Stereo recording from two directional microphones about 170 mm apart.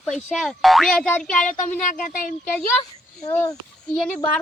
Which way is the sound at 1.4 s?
50° left (ahead or behind).